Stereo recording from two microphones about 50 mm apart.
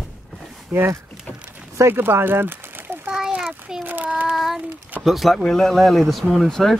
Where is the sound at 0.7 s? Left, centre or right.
Right.